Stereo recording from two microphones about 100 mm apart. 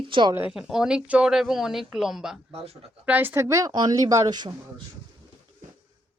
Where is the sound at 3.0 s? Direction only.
20° right (ahead or behind); by 4.5 s 45° right (ahead or behind).